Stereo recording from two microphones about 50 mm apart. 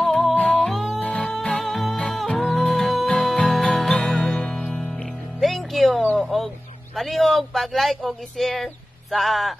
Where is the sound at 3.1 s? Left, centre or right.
Centre.